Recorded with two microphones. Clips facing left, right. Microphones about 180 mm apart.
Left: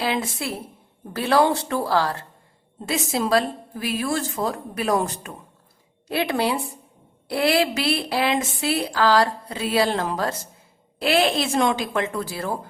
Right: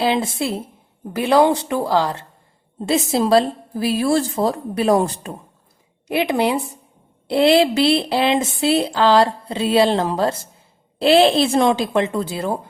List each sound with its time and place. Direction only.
0.0 s speech: 30° right (ahead or behind)
2.8 s a woman's voice: 30° right (ahead or behind)
6.1 s speech: 20° right (ahead or behind)